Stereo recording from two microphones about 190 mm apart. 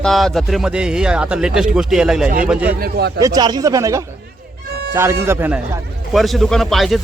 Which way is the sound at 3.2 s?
20° right (ahead or behind).